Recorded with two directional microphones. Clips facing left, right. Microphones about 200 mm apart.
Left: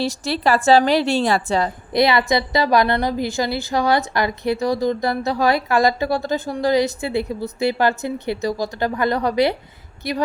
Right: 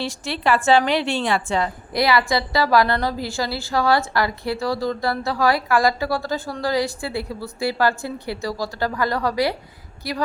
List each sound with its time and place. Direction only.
0.0 s a woman's voice: 40° left (ahead or behind)
1.9 s a woman's voice: 20° left (ahead or behind)